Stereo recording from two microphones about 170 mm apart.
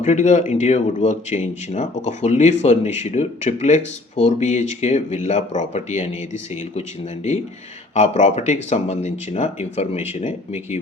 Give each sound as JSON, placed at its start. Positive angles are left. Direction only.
{"t": 0.0, "sound": "speech", "side_deg": 45}
{"t": 7.9, "sound": "speech", "side_deg": 40}